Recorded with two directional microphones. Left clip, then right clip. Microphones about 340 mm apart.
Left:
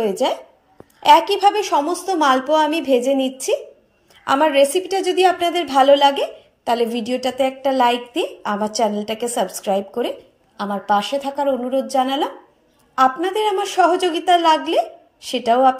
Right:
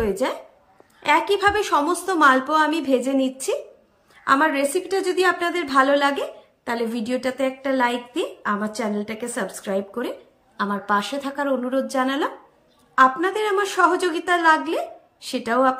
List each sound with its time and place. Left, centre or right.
0.0 s a woman's voice: centre
4.6 s a woman's voice: centre